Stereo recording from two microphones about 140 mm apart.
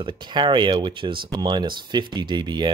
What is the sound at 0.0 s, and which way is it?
Speech, 35° right (ahead or behind).